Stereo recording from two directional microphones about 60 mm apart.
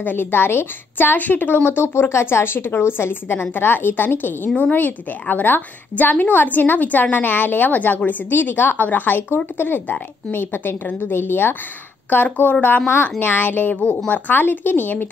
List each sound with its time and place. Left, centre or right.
0.0 s a woman's voice: left